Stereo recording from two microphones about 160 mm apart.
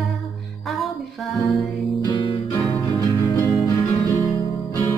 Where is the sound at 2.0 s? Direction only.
30° left (ahead or behind); by 5.0 s 15° left (ahead or behind).